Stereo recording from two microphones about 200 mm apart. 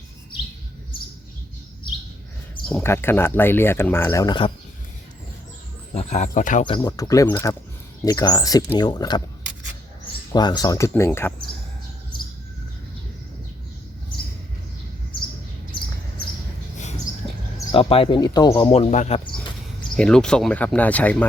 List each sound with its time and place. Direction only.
2.6 s speech: 10° left (ahead or behind)
5.9 s speech: 35° left (ahead or behind)
6.7 s speech: 20° left (ahead or behind)
10.3 s speech: 20° left (ahead or behind)
17.7 s speech: 25° left (ahead or behind)
20.0 s speech: 5° left (ahead or behind)